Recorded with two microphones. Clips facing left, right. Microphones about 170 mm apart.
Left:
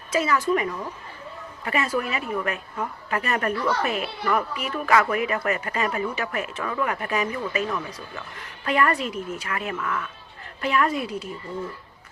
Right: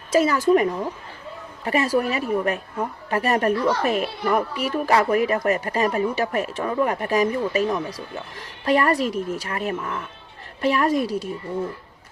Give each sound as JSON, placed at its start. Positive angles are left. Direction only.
{"t": 0.1, "sound": "a woman's voice", "side_deg": -40}
{"t": 8.6, "sound": "a woman's voice", "side_deg": -35}